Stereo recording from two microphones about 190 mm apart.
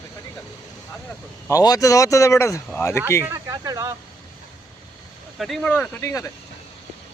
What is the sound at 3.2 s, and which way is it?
Speech, 15° right (ahead or behind).